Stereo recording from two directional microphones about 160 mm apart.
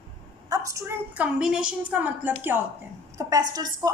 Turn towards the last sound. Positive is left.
turn(degrees=-25)  # may be behind; listen again after turning